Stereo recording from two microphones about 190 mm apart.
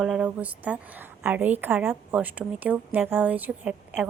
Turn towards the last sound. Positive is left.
turn(degrees=-10)  # may be behind; listen again after turning